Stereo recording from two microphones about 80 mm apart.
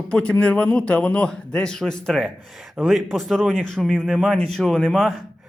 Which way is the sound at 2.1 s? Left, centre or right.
Centre.